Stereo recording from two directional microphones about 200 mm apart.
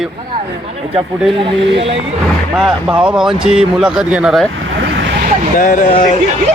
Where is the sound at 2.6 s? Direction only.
5° right (ahead or behind).